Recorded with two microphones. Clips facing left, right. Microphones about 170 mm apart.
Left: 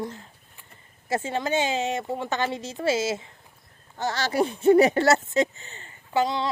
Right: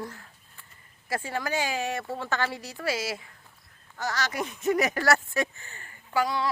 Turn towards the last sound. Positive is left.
turn(degrees=25)  # may be behind; listen again after turning